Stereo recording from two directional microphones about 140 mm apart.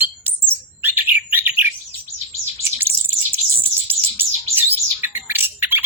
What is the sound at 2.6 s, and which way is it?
Bird, 15° right (ahead or behind).